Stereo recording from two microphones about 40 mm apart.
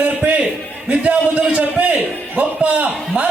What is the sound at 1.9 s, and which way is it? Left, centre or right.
A man's voice, right.